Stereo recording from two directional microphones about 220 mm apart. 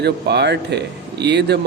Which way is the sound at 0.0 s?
50° right (ahead or behind).